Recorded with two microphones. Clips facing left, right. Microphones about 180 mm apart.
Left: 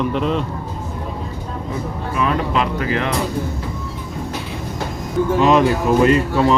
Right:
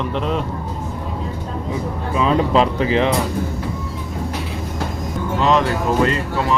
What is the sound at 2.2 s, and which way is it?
Speech, 30° right (ahead or behind).